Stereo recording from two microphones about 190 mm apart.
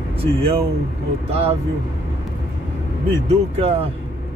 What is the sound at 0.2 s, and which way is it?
Speech, 30° right (ahead or behind).